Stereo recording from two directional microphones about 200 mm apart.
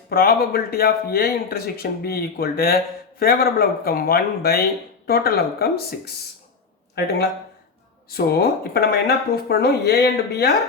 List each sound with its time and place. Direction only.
0.1 s speech: 50° left (ahead or behind)
8.1 s speech: 50° left (ahead or behind)